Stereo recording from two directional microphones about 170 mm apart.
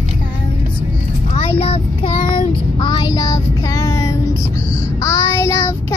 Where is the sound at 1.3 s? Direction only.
35° left (ahead or behind).